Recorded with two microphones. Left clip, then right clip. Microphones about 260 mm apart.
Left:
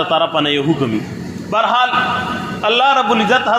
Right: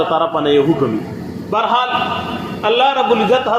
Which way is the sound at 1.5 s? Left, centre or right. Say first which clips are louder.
Left 1 dB; left.